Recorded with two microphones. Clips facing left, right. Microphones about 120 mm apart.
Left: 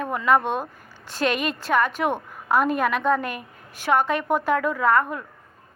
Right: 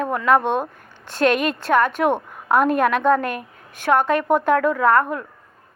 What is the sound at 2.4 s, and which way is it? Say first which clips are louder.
Speech: right 4 dB; centre (ahead or behind).